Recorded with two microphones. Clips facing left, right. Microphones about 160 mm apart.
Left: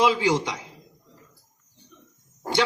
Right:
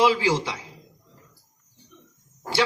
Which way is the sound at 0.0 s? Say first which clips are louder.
Even; 20° left (ahead or behind).